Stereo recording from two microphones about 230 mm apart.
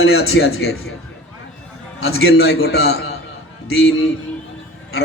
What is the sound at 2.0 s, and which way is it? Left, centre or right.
A man's voice, left.